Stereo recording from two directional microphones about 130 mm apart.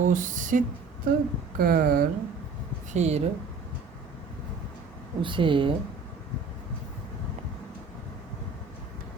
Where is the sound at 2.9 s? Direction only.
55° right (ahead or behind).